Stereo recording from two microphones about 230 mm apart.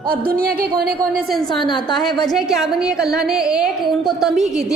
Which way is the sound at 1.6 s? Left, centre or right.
Centre.